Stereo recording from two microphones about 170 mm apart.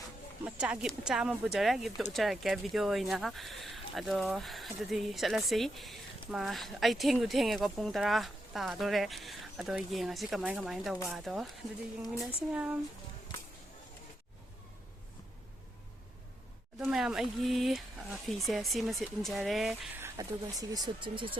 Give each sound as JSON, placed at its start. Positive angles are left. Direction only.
{"t": 0.4, "sound": "speech", "side_deg": -5}
{"t": 12.5, "sound": "speech", "side_deg": -5}
{"t": 16.8, "sound": "speech", "side_deg": -5}
{"t": 20.0, "sound": "speech", "side_deg": -20}